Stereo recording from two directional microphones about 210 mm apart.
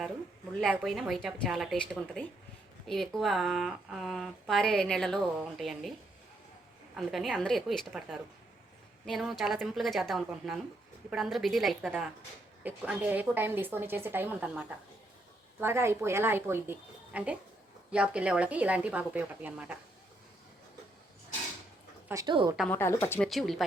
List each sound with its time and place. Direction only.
0.6 s speech: centre (ahead or behind)
6.9 s speech: centre (ahead or behind)
22.1 s speech: 20° right (ahead or behind)
22.7 s speech: 10° left (ahead or behind)
23.3 s speech: centre (ahead or behind)